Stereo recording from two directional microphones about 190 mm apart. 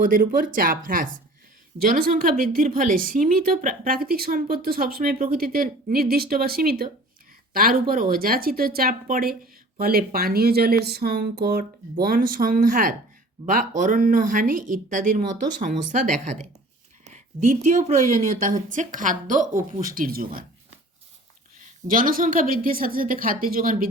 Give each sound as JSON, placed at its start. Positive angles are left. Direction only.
{"t": 0.0, "sound": "a woman's voice", "side_deg": -50}
{"t": 17.0, "sound": "a sound", "side_deg": -40}
{"t": 18.2, "sound": "a woman's voice", "side_deg": -40}
{"t": 21.8, "sound": "a woman's voice", "side_deg": -45}